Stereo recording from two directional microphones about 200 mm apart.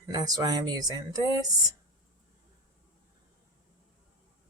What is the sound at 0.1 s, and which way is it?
Speech, 20° right (ahead or behind).